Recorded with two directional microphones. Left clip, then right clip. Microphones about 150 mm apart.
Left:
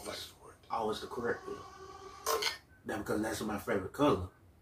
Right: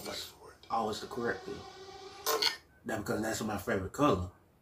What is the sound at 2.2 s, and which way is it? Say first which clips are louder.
Burping: right 3 dB; 25° right (ahead or behind).